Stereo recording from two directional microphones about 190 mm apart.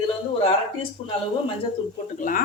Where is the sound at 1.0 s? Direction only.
30° left (ahead or behind).